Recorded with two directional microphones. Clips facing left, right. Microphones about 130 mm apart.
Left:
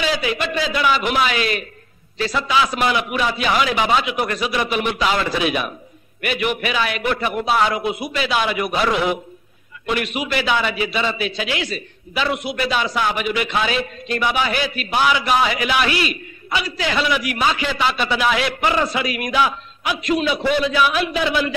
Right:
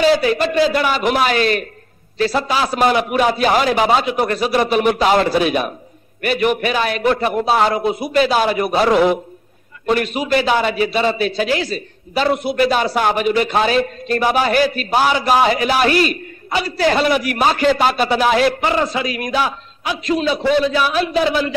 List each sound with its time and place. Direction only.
0.0 s a man's voice: 40° right (ahead or behind)